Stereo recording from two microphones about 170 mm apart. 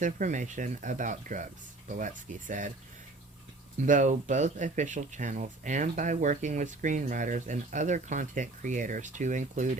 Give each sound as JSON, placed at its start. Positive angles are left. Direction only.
{"t": 0.0, "sound": "speech", "side_deg": -50}
{"t": 3.8, "sound": "speech", "side_deg": -45}